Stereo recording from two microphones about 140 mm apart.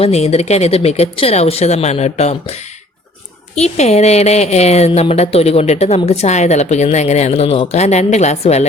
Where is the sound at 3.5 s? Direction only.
50° left (ahead or behind).